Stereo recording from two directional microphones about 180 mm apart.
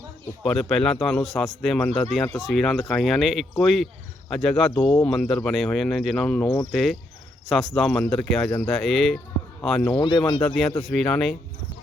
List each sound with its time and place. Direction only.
0.4 s speech: 5° left (ahead or behind)
10.0 s speech: 25° left (ahead or behind)
10.9 s speech: 5° left (ahead or behind)